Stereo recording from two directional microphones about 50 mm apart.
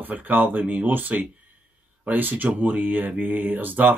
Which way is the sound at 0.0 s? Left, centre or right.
Right.